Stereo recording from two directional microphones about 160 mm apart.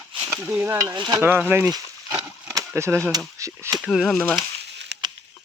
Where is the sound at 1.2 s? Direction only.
15° right (ahead or behind).